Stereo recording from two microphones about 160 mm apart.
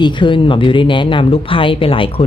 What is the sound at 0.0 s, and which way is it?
Speech, 30° left (ahead or behind).